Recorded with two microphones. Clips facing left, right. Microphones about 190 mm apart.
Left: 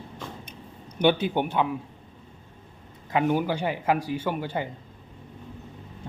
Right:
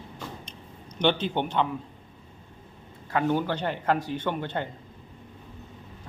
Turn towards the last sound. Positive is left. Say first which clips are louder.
# left 1 dB
turn(degrees=10)  # may be behind; listen again after turning